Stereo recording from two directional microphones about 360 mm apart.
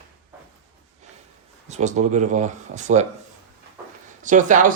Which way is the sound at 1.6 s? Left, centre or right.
Centre.